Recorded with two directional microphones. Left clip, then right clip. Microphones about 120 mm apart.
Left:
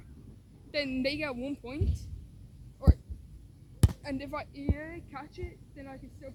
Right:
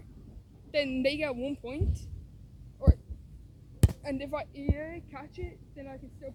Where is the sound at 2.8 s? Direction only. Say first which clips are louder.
Right 1 dB; 15° right (ahead or behind).